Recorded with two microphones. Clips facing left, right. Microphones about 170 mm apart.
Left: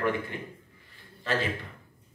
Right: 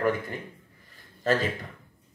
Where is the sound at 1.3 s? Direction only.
40° right (ahead or behind).